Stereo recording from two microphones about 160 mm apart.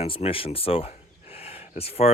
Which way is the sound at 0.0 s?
35° left (ahead or behind).